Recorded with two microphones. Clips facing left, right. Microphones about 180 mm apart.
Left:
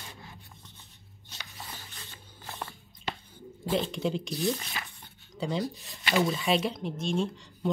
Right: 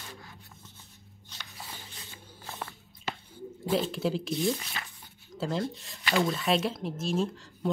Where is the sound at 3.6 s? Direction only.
Centre (ahead or behind).